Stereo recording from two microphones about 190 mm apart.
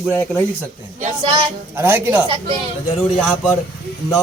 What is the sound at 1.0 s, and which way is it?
Speech, 40° right (ahead or behind).